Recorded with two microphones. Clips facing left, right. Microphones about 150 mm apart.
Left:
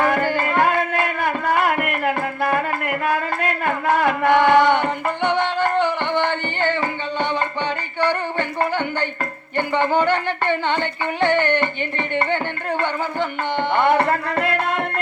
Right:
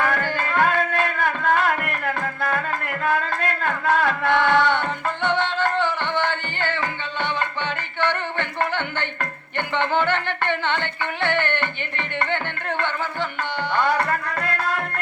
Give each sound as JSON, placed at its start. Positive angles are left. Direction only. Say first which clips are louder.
{"t": 0.0, "sound": "music", "louder": "left 4 dB", "side_deg": 15}
{"t": 7.9, "sound": "a sound", "louder": "left 3 dB", "side_deg": 15}
{"t": 9.6, "sound": "music", "louder": "left 4 dB", "side_deg": 10}